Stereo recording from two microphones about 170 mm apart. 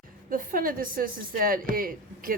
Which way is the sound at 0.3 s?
55° right (ahead or behind).